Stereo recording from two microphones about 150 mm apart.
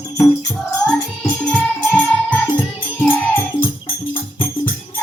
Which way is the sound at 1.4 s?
10° left (ahead or behind).